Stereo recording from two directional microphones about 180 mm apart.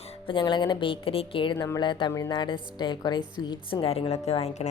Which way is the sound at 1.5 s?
20° left (ahead or behind).